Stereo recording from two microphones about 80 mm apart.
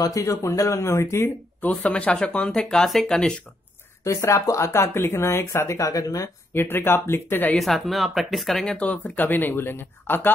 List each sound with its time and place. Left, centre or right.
0.0 s speech: left
1.6 s speech: centre
4.0 s speech: left
6.5 s speech: left
7.5 s speech: centre
8.7 s speech: centre